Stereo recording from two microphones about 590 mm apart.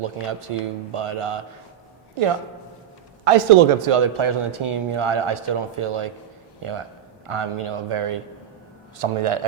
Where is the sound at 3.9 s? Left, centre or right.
Right.